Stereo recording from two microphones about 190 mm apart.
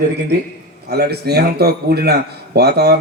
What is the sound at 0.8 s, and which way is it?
A man's voice, 55° right (ahead or behind).